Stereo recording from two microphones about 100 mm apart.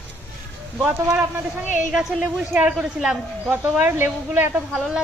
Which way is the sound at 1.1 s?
15° right (ahead or behind).